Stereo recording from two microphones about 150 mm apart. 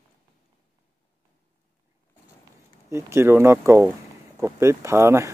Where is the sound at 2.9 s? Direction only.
15° right (ahead or behind).